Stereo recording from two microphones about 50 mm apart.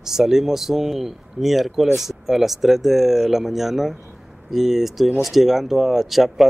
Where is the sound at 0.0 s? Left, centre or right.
Centre.